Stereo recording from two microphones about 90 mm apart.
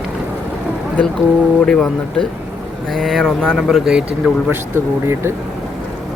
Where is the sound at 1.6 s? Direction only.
5° left (ahead or behind).